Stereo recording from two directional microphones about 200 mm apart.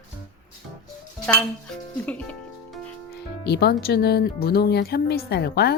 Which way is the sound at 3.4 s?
55° left (ahead or behind).